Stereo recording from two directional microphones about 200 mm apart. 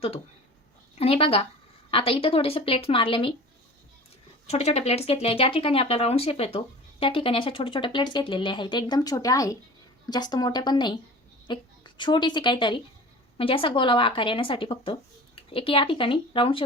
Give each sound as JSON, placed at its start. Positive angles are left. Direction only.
{"t": 0.9, "sound": "speech", "side_deg": 30}
{"t": 4.4, "sound": "a woman's voice", "side_deg": 30}